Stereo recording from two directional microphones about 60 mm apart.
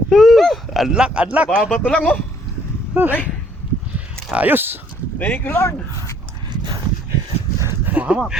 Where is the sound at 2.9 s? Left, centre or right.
Right.